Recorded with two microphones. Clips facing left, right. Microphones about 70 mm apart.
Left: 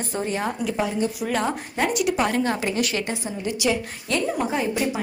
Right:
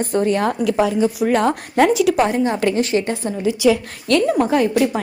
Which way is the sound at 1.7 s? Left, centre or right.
Right.